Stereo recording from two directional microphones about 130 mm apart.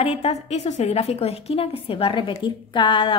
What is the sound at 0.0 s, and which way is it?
A woman's voice, 55° left (ahead or behind).